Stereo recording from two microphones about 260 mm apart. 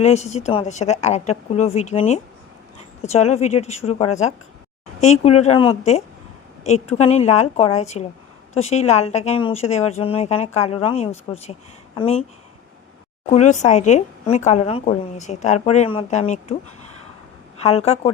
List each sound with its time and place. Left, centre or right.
0.0 s a woman's voice: left
13.3 s a woman's voice: left
17.6 s a woman's voice: left